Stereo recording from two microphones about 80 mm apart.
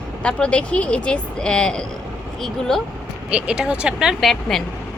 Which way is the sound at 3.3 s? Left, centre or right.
Centre.